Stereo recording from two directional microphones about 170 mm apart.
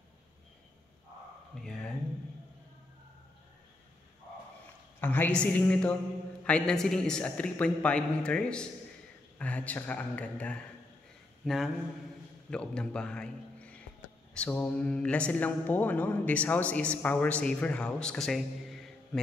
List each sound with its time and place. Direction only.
1.6 s a man's voice: 5° left (ahead or behind)
5.0 s a man's voice: 10° left (ahead or behind)
11.4 s a man's voice: centre (ahead or behind)